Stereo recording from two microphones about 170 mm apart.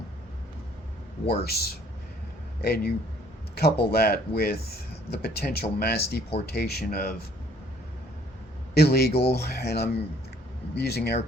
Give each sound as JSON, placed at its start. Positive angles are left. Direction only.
{"t": 1.3, "sound": "speech", "side_deg": 70}
{"t": 8.7, "sound": "a man's voice", "side_deg": 70}